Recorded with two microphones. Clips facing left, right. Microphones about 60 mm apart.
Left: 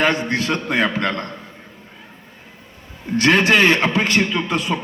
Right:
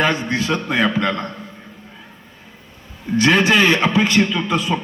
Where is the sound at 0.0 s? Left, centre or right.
Left.